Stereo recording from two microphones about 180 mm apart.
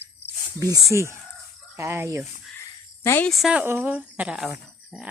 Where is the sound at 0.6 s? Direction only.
20° right (ahead or behind).